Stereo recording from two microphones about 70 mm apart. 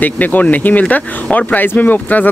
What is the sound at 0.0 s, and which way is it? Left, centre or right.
Speech, left.